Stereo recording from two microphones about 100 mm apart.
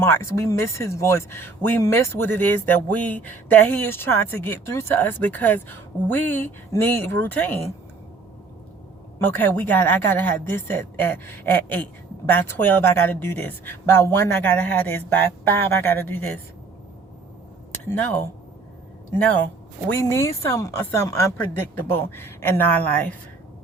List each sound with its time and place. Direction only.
0.0 s speech: 25° left (ahead or behind)
9.1 s speech: 20° left (ahead or behind)
19.9 s speech: 25° left (ahead or behind)